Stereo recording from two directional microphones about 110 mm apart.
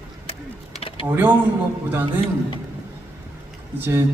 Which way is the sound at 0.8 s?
55° left (ahead or behind).